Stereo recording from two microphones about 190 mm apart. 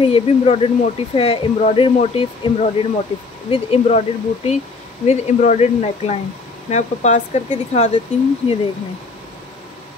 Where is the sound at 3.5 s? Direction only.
30° left (ahead or behind).